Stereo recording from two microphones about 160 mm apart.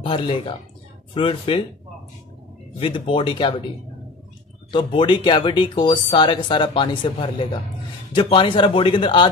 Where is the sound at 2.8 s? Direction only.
30° left (ahead or behind).